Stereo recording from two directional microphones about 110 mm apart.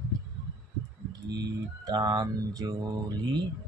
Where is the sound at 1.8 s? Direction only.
40° right (ahead or behind).